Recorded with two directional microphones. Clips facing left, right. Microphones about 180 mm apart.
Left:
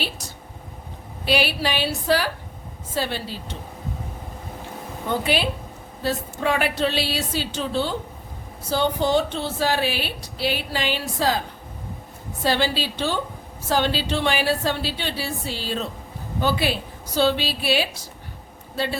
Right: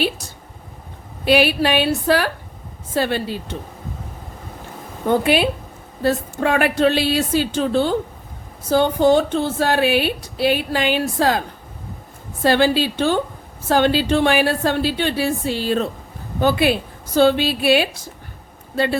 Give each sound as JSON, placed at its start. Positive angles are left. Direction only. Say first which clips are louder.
{"t": 1.2, "sound": "a woman's voice", "louder": "right 7 dB", "side_deg": -55}
{"t": 5.0, "sound": "a woman's voice", "louder": "right 7 dB", "side_deg": -55}
{"t": 12.4, "sound": "a woman's voice", "louder": "right 7 dB", "side_deg": -55}